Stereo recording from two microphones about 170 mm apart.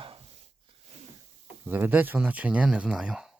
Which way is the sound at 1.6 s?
10° right (ahead or behind).